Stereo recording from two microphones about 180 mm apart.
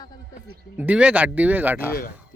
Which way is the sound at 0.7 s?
5° right (ahead or behind).